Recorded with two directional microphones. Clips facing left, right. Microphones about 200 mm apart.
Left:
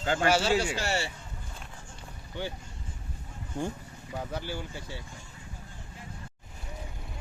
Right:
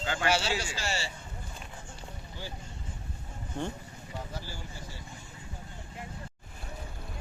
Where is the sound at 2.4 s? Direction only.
65° left (ahead or behind).